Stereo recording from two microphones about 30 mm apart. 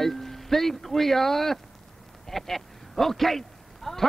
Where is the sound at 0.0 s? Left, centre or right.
Centre.